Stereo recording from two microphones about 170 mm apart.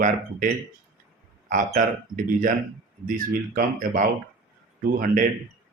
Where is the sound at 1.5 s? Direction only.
50° right (ahead or behind).